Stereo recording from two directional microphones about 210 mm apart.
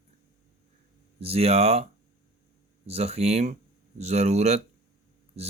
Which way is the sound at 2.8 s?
30° right (ahead or behind).